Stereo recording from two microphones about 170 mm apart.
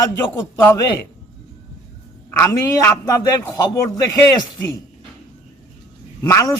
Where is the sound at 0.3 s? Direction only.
20° left (ahead or behind).